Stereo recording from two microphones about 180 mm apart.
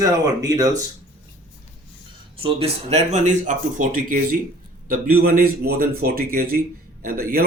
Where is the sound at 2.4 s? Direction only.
35° right (ahead or behind).